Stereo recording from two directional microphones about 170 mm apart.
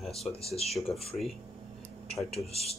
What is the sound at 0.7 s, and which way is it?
Speech, centre (ahead or behind).